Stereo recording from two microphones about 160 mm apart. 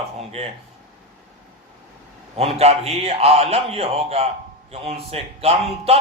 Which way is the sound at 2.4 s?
40° right (ahead or behind).